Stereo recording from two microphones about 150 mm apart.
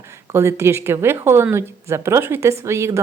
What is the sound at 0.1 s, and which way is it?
Speech, 20° right (ahead or behind).